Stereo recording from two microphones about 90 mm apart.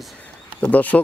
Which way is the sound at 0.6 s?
15° left (ahead or behind).